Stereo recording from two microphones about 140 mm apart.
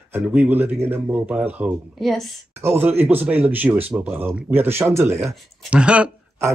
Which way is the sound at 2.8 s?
15° right (ahead or behind).